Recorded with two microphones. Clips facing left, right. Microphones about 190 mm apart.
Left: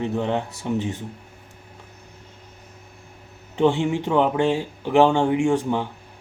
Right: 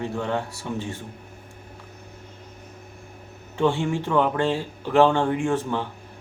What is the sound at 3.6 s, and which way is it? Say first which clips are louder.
Speech: left 3 dB; 20° left (ahead or behind).